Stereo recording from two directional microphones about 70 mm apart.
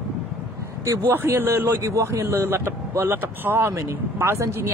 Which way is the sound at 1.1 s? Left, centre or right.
Right.